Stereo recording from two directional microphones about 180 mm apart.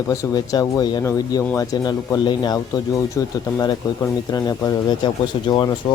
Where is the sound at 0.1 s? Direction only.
15° left (ahead or behind).